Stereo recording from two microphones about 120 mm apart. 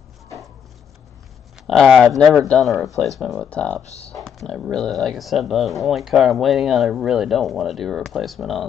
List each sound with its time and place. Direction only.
1.7 s speech: centre (ahead or behind)
3.8 s speech: 65° left (ahead or behind)
4.2 s speech: 5° left (ahead or behind)